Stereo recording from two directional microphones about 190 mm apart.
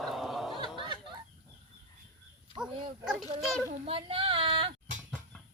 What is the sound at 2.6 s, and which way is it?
Dog, 5° right (ahead or behind).